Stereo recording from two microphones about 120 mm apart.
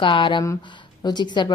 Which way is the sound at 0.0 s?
45° left (ahead or behind).